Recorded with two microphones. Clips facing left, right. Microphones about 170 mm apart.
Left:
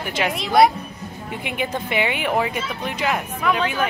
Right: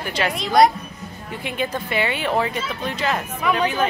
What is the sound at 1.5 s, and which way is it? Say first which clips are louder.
Speech: right 1 dB; 15° left (ahead or behind).